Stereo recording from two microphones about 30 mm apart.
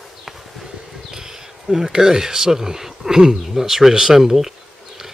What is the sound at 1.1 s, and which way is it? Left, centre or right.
Speech, centre.